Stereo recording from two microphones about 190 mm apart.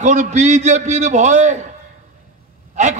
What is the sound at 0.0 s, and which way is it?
A man's voice, 40° right (ahead or behind).